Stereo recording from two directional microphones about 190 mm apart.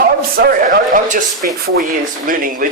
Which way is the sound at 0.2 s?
50° right (ahead or behind).